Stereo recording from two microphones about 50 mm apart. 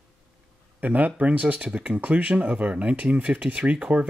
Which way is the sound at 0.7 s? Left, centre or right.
Right.